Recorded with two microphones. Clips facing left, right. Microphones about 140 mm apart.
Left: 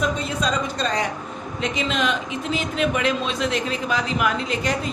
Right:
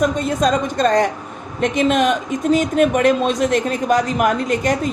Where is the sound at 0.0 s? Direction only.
50° right (ahead or behind).